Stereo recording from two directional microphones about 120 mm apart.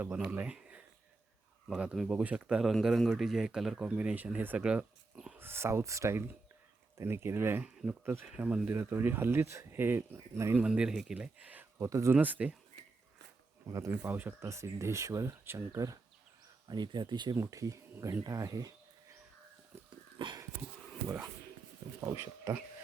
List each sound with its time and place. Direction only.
0.0 s speech: 15° right (ahead or behind)
5.4 s speech: 20° right (ahead or behind)
10.6 s speech: 5° right (ahead or behind)
11.8 s speech: 25° right (ahead or behind)
12.1 s speech: 15° right (ahead or behind)
13.7 s speech: 25° right (ahead or behind)
13.9 s speech: 15° right (ahead or behind)
20.1 s a sound: 40° right (ahead or behind)
22.0 s speech: 25° right (ahead or behind)